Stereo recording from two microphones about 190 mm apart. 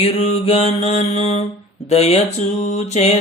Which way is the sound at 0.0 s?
35° left (ahead or behind).